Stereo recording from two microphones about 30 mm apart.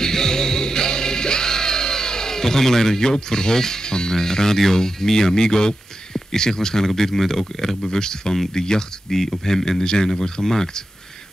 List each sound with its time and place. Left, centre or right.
0.0 s music: centre
6.9 s speech: centre
7.9 s speech: left